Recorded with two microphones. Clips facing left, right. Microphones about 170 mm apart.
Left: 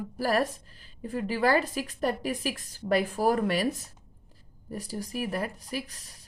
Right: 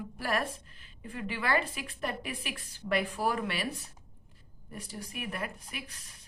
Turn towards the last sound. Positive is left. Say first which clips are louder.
# left 9 dB
turn(degrees=35)  # may be behind; listen again after turning